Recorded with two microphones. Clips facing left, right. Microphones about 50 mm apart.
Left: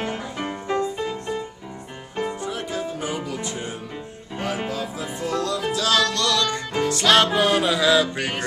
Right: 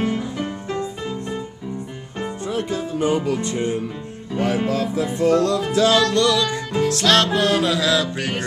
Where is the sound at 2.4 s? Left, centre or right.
Right.